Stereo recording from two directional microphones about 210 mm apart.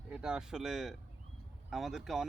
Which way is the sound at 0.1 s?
5° right (ahead or behind).